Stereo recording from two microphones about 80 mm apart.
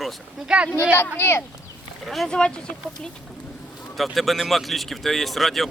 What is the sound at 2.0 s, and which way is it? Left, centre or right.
Speech, centre.